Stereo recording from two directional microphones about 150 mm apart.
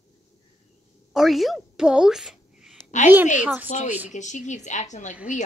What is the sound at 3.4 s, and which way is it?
Speech, 10° right (ahead or behind).